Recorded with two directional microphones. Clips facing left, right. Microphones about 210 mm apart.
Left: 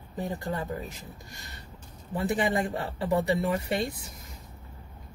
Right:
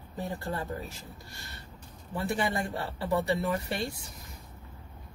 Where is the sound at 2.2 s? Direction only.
20° left (ahead or behind).